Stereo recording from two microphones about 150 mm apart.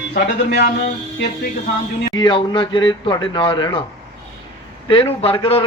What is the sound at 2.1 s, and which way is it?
A man's voice, 30° left (ahead or behind).